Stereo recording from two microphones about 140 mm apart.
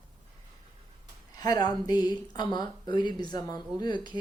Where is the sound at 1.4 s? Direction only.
30° left (ahead or behind).